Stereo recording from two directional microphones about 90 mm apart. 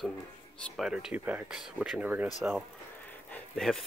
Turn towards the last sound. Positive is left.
turn(degrees=5)  # may be behind; listen again after turning